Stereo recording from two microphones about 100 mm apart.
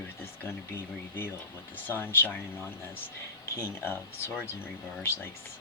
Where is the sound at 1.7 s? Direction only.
20° left (ahead or behind).